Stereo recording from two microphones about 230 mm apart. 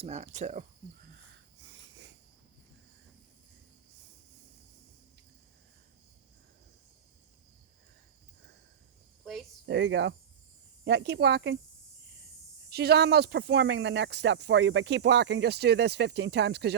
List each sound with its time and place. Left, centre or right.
0.0 s speech: right
9.2 s cricket: centre
9.6 s speech: right
12.7 s speech: right